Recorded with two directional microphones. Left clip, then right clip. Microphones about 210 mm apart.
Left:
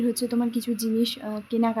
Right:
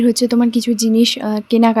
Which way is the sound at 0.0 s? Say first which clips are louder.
Right 11 dB; 40° right (ahead or behind).